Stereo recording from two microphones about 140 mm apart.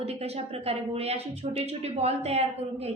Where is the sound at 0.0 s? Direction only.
45° right (ahead or behind).